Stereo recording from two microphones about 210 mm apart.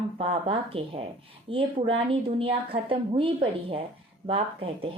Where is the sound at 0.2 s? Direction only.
25° right (ahead or behind).